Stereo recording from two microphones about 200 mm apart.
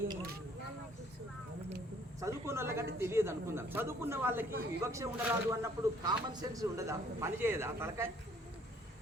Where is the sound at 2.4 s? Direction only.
15° right (ahead or behind).